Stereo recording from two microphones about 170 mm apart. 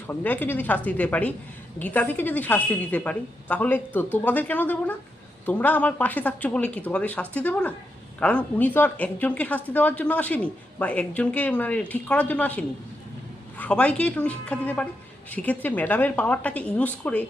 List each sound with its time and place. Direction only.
0.1 s a woman's voice: 10° left (ahead or behind)